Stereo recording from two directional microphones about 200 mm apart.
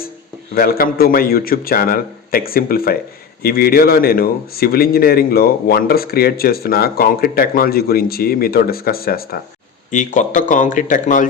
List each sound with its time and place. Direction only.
0.5 s speech: 45° left (ahead or behind)